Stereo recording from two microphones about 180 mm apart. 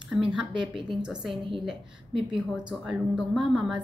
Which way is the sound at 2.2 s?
5° right (ahead or behind).